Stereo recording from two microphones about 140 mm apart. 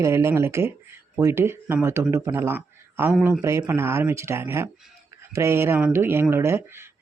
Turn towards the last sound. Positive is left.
turn(degrees=-15)  # may be behind; listen again after turning